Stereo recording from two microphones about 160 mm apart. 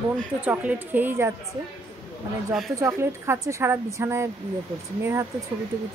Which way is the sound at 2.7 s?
15° right (ahead or behind).